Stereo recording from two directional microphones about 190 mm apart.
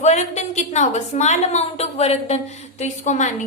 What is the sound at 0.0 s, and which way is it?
A woman's voice, 35° left (ahead or behind).